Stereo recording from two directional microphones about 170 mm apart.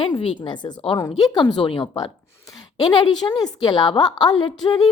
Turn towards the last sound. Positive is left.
turn(degrees=30)  # may be behind; listen again after turning